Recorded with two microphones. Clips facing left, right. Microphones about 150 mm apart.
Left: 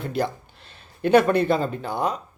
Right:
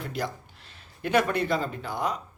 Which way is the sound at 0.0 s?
30° left (ahead or behind).